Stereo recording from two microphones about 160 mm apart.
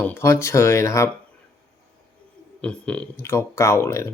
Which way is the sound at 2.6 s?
5° left (ahead or behind).